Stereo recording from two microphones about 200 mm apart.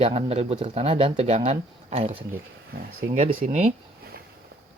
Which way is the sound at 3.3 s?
45° right (ahead or behind).